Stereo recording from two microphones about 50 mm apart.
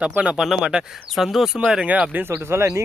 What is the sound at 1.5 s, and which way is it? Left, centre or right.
Speech, centre.